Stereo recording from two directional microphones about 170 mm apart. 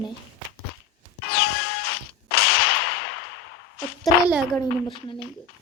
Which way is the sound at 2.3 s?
65° left (ahead or behind).